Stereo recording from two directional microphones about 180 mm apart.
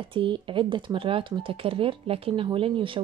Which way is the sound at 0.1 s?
25° right (ahead or behind).